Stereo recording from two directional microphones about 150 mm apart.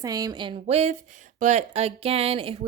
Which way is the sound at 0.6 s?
45° right (ahead or behind).